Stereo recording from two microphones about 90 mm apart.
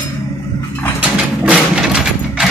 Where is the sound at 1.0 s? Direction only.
10° right (ahead or behind).